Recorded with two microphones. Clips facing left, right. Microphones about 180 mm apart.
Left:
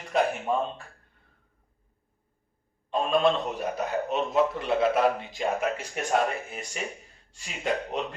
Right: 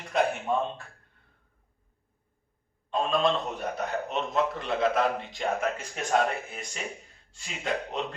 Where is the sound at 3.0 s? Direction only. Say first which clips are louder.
Left 3 dB; 5° left (ahead or behind).